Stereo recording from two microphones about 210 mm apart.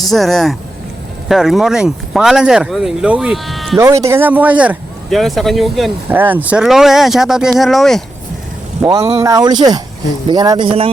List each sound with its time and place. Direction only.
0.0 s speech: centre (ahead or behind)
3.8 s speech: 15° right (ahead or behind); by 8.0 s centre (ahead or behind)
8.8 s speech: 15° right (ahead or behind)